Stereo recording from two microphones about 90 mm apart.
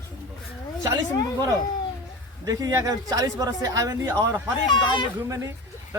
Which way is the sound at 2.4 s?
40° right (ahead or behind).